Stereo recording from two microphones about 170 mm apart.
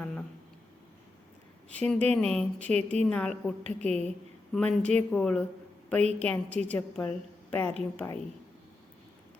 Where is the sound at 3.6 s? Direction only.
40° right (ahead or behind).